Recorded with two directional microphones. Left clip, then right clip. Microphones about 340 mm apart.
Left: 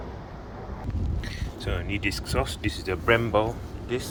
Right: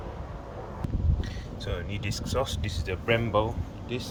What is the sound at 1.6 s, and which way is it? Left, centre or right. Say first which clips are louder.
Speech: left 6 dB; centre.